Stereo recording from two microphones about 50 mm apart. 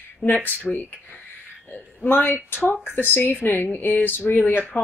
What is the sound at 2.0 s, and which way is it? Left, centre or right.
Speech, left.